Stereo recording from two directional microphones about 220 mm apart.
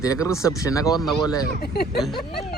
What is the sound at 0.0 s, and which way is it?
Speech, 15° left (ahead or behind).